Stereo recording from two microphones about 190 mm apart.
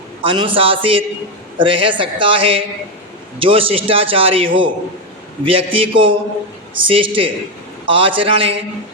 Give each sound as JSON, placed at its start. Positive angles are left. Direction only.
{"t": 0.3, "sound": "a man's voice", "side_deg": -25}